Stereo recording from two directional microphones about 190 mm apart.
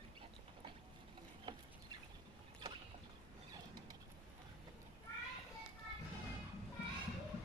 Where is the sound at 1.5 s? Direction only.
20° right (ahead or behind).